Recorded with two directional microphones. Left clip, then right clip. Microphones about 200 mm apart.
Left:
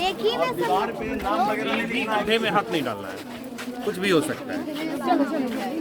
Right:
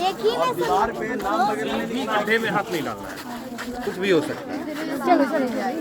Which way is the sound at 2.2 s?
50° left (ahead or behind).